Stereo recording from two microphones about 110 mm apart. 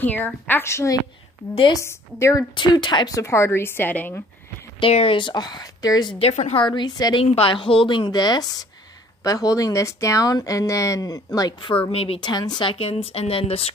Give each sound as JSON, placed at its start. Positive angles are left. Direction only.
{"t": 0.0, "sound": "a woman's voice", "side_deg": 15}
{"t": 2.5, "sound": "a woman's voice", "side_deg": 45}
{"t": 3.2, "sound": "a woman's voice", "side_deg": 25}
{"t": 4.9, "sound": "speech", "side_deg": 50}
{"t": 6.1, "sound": "a woman's voice", "side_deg": 80}
{"t": 6.5, "sound": "a woman's voice", "side_deg": 45}
{"t": 7.4, "sound": "a woman's voice", "side_deg": 55}
{"t": 11.6, "sound": "speech", "side_deg": 55}
{"t": 12.2, "sound": "a woman's voice", "side_deg": 40}
{"t": 12.7, "sound": "speech", "side_deg": 65}